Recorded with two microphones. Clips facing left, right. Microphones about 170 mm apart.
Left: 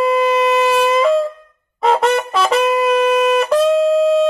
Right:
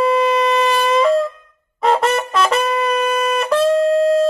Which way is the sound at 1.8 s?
Centre (ahead or behind).